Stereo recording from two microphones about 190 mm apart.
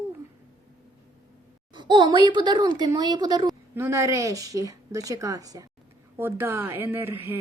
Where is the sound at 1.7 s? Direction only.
25° right (ahead or behind).